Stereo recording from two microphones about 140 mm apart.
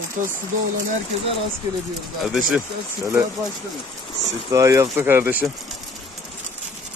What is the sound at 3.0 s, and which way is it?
Speech, 20° right (ahead or behind).